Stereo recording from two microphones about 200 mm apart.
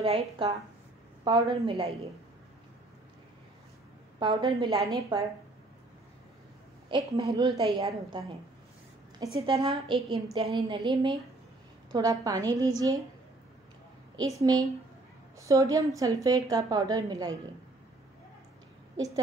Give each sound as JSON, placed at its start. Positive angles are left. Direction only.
{"t": 0.0, "sound": "a woman's voice", "side_deg": -30}
{"t": 4.2, "sound": "a woman's voice", "side_deg": -20}
{"t": 6.9, "sound": "a woman's voice", "side_deg": -20}
{"t": 9.5, "sound": "a woman's voice", "side_deg": -25}
{"t": 14.4, "sound": "a woman's voice", "side_deg": -20}
{"t": 18.9, "sound": "a woman's voice", "side_deg": -15}